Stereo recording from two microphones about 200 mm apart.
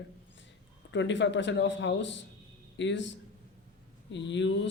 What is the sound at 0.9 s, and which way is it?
Speech, 65° left (ahead or behind).